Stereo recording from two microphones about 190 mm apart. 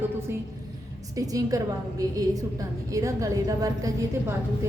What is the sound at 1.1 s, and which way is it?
A woman's voice, 20° right (ahead or behind).